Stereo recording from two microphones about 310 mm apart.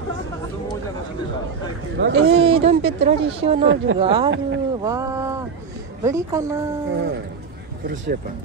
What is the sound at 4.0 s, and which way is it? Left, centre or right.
Speech, centre.